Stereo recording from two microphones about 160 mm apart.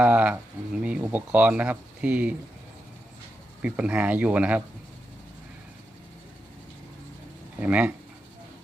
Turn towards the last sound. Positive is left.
turn(degrees=-10)  # may be behind; listen again after turning